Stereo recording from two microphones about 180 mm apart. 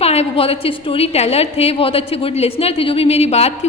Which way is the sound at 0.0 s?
35° left (ahead or behind).